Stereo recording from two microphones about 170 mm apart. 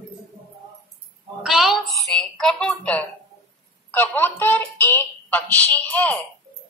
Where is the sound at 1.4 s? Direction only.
5° right (ahead or behind).